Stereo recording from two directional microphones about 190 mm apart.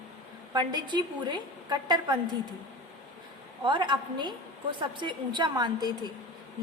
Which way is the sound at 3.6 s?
25° right (ahead or behind).